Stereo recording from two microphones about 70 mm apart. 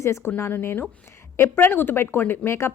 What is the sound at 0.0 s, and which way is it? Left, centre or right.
Speech, left.